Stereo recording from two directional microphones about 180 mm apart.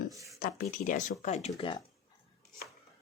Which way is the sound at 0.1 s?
20° right (ahead or behind).